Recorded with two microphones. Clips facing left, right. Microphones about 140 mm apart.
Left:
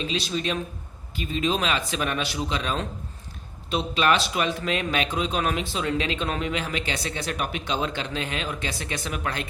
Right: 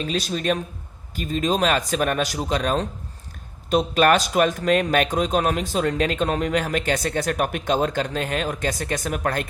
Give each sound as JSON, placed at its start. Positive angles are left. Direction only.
{"t": 0.0, "sound": "speech", "side_deg": -45}